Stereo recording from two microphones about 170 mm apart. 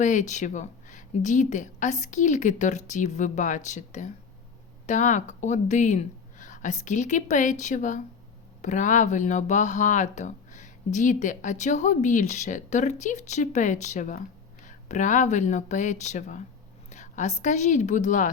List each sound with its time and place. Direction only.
0.0 s a woman's voice: 45° left (ahead or behind)